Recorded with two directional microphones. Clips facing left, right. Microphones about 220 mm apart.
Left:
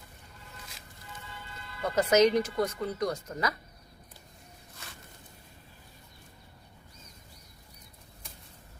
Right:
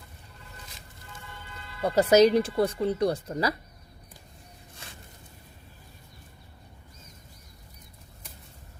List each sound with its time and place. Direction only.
1.8 s speech: 35° right (ahead or behind)